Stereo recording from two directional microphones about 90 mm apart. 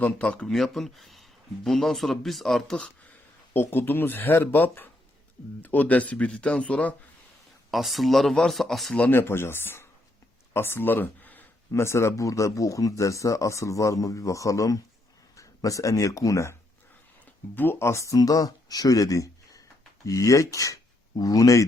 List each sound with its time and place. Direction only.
0.0 s speech: 15° left (ahead or behind)
3.5 s speech: 25° left (ahead or behind)
7.7 s speech: centre (ahead or behind)
9.0 s speech: 25° left (ahead or behind)
11.7 s speech: 30° left (ahead or behind)
17.5 s speech: 25° left (ahead or behind); by 21.6 s 40° left (ahead or behind)